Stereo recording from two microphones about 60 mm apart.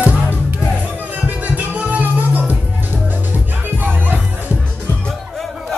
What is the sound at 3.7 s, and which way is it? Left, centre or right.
Music, right.